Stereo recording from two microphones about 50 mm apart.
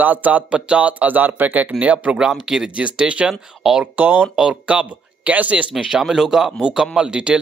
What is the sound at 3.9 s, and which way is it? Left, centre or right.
Speech, right.